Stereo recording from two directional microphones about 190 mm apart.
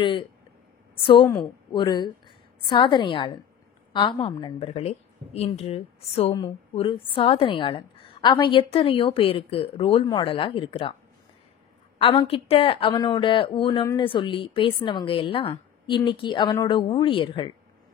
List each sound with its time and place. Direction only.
0.0 s a woman's voice: 25° left (ahead or behind)
12.0 s a woman's voice: 30° left (ahead or behind)